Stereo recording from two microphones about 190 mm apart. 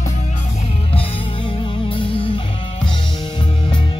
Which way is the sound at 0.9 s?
30° left (ahead or behind).